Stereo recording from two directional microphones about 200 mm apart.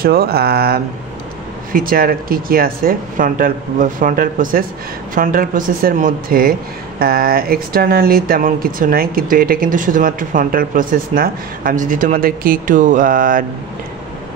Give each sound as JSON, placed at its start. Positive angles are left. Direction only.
{"t": 0.0, "sound": "speech", "side_deg": -50}